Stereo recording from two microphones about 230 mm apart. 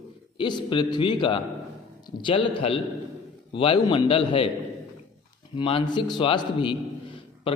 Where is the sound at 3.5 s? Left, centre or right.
Left.